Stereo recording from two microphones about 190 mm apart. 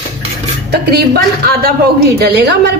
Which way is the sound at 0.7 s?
60° right (ahead or behind).